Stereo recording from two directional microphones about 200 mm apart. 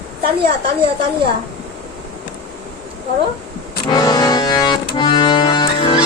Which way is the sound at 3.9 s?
20° left (ahead or behind).